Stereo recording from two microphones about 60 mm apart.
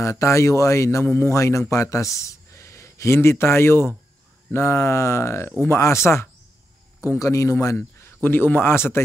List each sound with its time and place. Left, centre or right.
0.0 s speech: left
1.0 s speech: left
1.3 s speech: left
7.2 s speech: left
8.2 s speech: left
8.7 s speech: left